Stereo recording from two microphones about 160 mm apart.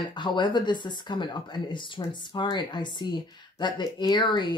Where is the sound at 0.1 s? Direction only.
30° left (ahead or behind).